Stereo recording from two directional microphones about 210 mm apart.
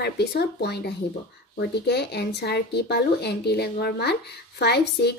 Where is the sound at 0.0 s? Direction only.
50° left (ahead or behind).